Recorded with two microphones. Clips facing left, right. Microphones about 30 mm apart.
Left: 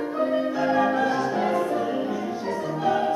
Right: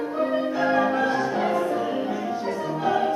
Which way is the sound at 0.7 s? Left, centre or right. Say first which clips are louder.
Even; centre.